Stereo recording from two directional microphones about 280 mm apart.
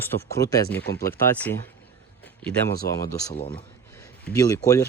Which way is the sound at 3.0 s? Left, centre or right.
Centre.